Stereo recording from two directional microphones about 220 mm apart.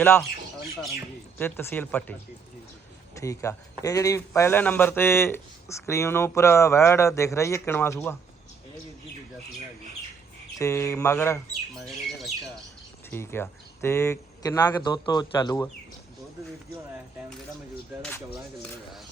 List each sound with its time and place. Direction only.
0.0 s speech: 10° left (ahead or behind)
1.4 s speech: 10° left (ahead or behind)
3.2 s speech: 15° left (ahead or behind)
10.6 s speech: 15° left (ahead or behind)
13.1 s speech: 10° left (ahead or behind)